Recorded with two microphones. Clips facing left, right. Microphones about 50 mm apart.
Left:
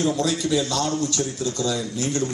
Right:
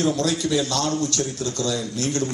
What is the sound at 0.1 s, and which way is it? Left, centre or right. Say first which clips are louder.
A man's voice: even; centre.